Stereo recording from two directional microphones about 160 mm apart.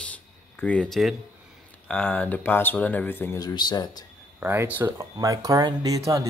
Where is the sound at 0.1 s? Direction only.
10° left (ahead or behind).